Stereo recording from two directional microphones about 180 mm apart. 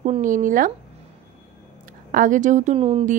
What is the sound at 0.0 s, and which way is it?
Speech, 40° right (ahead or behind).